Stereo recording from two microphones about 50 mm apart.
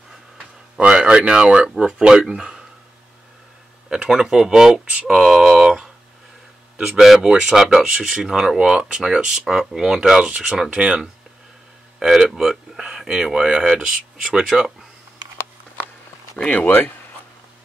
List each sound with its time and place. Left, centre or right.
0.7 s speech: centre
3.9 s speech: centre
5.0 s a sound: centre
6.8 s speech: centre; by 11.0 s right
12.0 s speech: centre
16.4 s speech: left